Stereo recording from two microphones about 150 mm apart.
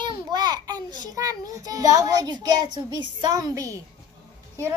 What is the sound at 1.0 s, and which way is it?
A child's voice, 25° right (ahead or behind).